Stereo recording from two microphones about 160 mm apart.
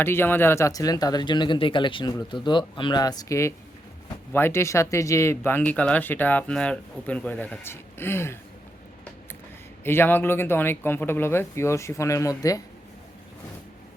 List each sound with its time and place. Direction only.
0.0 s speech: 15° left (ahead or behind)
9.8 s speech: 15° left (ahead or behind)